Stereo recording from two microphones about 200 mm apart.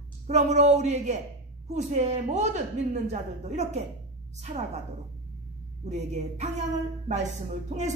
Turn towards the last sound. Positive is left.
turn(degrees=-35)  # may be behind; listen again after turning